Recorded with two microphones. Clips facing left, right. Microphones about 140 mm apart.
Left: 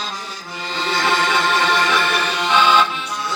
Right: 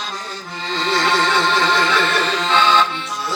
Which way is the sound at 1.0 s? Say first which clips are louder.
Even; 10° left (ahead or behind).